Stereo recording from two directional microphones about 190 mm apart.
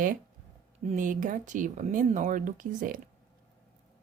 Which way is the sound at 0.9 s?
45° right (ahead or behind).